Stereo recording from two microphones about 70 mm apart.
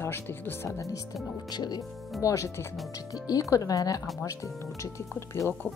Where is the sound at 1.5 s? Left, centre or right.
Left.